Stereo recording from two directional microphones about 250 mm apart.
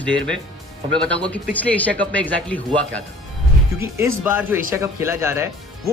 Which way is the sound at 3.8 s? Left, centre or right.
Centre.